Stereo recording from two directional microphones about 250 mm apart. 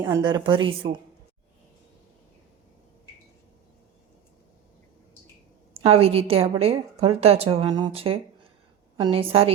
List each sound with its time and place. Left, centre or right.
0.0 s a woman's voice: centre
5.8 s a woman's voice: right